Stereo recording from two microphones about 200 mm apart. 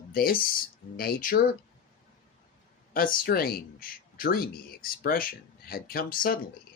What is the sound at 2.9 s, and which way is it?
Speech, 45° left (ahead or behind).